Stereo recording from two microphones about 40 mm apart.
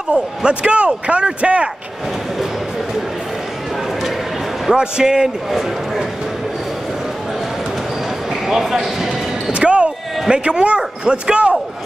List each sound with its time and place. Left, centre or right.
0.1 s speech: right
4.7 s a man's voice: centre
8.3 s speech: centre
9.6 s speech: right